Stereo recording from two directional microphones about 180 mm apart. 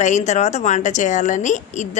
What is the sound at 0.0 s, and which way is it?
Speech, 40° left (ahead or behind).